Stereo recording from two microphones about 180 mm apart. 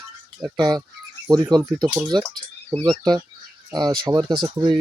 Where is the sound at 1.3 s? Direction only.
20° right (ahead or behind).